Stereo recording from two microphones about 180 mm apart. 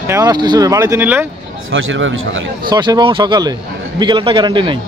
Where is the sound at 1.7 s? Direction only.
90° right.